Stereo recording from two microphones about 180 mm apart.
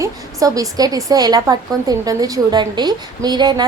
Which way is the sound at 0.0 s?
20° right (ahead or behind).